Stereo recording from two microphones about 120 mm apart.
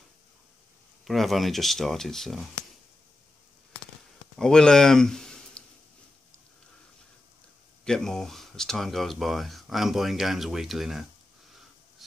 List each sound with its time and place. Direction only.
1.0 s speech: centre (ahead or behind)
4.4 s speech: 5° left (ahead or behind)
7.8 s speech: 5° left (ahead or behind)